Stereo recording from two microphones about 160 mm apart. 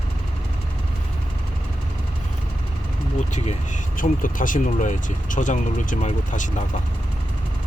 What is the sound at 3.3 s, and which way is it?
Speech, 50° left (ahead or behind).